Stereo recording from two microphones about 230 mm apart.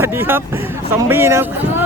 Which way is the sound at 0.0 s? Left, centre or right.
Centre.